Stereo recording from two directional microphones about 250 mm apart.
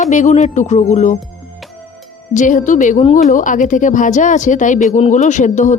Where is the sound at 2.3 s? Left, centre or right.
Left.